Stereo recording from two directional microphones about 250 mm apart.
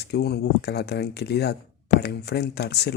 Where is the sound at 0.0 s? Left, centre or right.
Left.